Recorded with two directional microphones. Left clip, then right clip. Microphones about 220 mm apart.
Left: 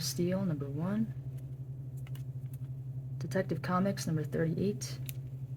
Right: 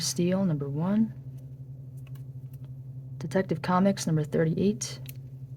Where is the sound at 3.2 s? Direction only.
30° right (ahead or behind).